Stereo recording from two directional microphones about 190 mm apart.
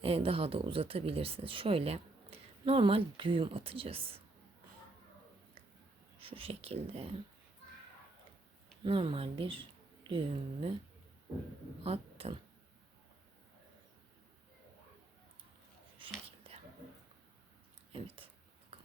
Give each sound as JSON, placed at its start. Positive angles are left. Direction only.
{"t": 0.0, "sound": "speech", "side_deg": -30}
{"t": 6.1, "sound": "speech", "side_deg": -30}
{"t": 8.8, "sound": "speech", "side_deg": -25}
{"t": 11.8, "sound": "speech", "side_deg": -30}
{"t": 16.0, "sound": "whispering", "side_deg": -30}
{"t": 17.9, "sound": "a sound", "side_deg": -30}